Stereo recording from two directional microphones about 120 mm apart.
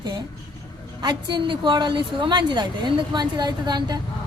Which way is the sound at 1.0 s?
40° right (ahead or behind).